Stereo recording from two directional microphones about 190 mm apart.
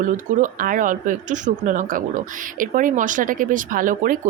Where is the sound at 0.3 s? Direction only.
45° right (ahead or behind).